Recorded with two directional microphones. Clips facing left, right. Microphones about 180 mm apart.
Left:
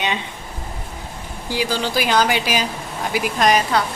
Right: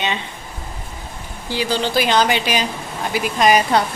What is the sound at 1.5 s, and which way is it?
Speech, 10° left (ahead or behind).